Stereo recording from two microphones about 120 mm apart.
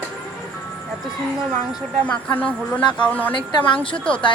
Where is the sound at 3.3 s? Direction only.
45° left (ahead or behind).